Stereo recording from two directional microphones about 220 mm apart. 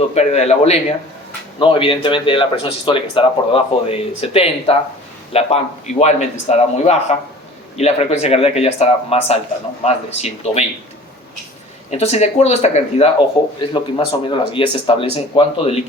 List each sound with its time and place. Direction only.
0.1 s speech: 30° left (ahead or behind)
11.9 s speech: 30° left (ahead or behind)